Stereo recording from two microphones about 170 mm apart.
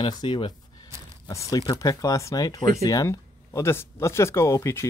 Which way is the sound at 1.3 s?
20° left (ahead or behind).